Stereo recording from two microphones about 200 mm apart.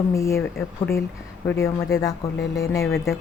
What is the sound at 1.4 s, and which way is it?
Speech, 15° left (ahead or behind).